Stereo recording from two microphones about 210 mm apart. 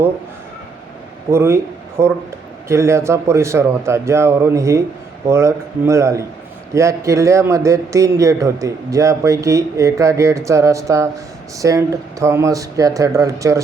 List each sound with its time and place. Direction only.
1.3 s a man's voice: 10° right (ahead or behind)